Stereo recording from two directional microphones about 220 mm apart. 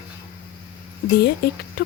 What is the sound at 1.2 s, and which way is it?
Speech, 45° left (ahead or behind).